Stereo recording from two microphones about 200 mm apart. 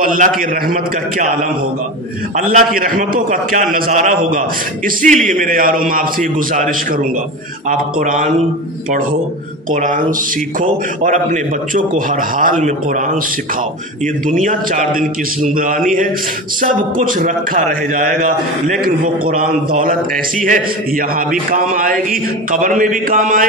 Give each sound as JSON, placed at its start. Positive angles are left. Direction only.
{"t": 0.0, "sound": "a man's voice", "side_deg": -40}
{"t": 2.3, "sound": "a man's voice", "side_deg": -45}
{"t": 9.7, "sound": "a man's voice", "side_deg": -40}
{"t": 14.2, "sound": "a man's voice", "side_deg": -40}